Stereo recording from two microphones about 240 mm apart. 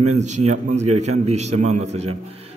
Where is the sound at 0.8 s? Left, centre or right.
Right.